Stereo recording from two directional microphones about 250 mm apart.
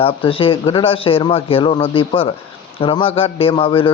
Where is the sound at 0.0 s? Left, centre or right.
Left.